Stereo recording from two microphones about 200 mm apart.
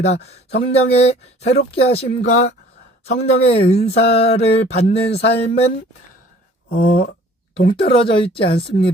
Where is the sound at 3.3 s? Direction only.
30° left (ahead or behind).